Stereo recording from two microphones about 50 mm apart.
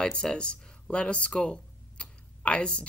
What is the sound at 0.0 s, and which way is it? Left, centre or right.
Speech, centre.